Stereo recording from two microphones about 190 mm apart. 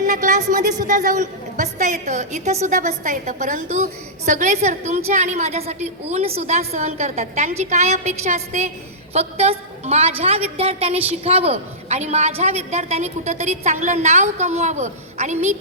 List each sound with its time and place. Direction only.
0.1 s a woman's voice: 40° right (ahead or behind)